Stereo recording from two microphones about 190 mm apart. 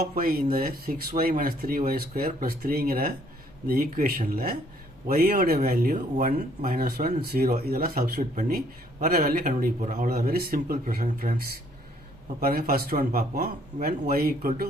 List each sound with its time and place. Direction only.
0.0 s speech: 50° right (ahead or behind)